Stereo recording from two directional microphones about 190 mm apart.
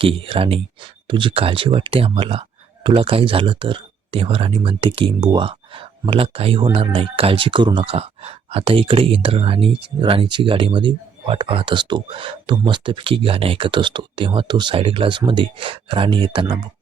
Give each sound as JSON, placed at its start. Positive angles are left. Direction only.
{"t": 0.0, "sound": "speech", "side_deg": -30}